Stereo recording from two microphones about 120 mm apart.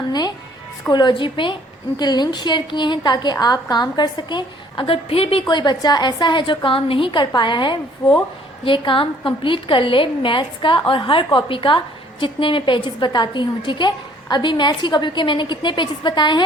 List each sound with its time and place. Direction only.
0.1 s a woman's voice: 35° left (ahead or behind)